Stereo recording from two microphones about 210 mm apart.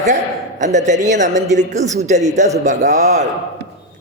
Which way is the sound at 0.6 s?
35° right (ahead or behind).